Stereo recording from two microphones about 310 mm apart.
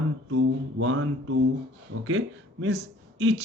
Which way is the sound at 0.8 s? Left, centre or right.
Right.